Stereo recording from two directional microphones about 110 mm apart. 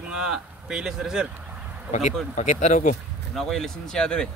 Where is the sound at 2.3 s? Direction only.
90° left.